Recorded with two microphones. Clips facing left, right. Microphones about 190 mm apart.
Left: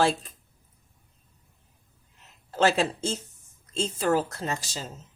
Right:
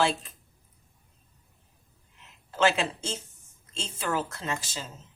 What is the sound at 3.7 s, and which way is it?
A woman's voice, 40° left (ahead or behind).